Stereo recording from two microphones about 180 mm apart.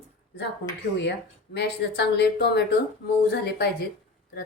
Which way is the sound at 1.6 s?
65° left (ahead or behind).